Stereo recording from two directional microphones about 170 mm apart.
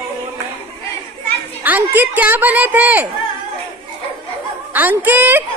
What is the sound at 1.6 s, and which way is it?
A woman's voice, 10° right (ahead or behind).